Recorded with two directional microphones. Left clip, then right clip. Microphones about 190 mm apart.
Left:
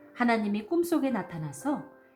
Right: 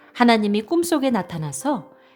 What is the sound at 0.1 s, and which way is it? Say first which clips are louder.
A woman's voice: right 10 dB; 55° right (ahead or behind).